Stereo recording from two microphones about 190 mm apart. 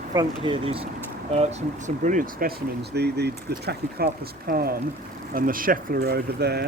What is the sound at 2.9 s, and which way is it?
Speech, 60° right (ahead or behind).